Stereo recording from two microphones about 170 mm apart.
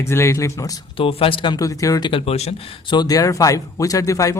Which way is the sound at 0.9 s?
35° left (ahead or behind).